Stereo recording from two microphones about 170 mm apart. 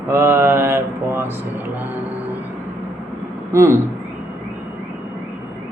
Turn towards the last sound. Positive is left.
turn(degrees=-15)  # may be behind; listen again after turning